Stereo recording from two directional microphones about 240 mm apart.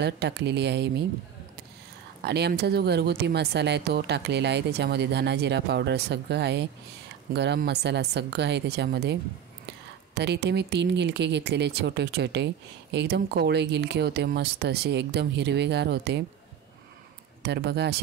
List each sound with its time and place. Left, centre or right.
0.0 s speech: right
2.2 s speech: right
17.4 s speech: right